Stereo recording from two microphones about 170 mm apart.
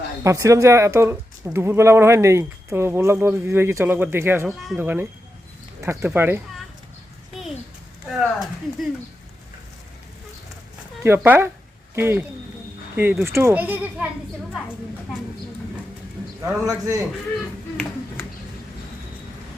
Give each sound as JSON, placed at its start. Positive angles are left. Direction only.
{"t": 0.2, "sound": "speech", "side_deg": -20}
{"t": 8.0, "sound": "speech", "side_deg": 0}
{"t": 11.0, "sound": "speech", "side_deg": -15}
{"t": 16.6, "sound": "speech", "side_deg": -20}